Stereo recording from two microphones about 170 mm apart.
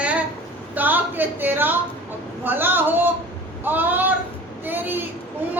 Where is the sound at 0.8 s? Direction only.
10° right (ahead or behind).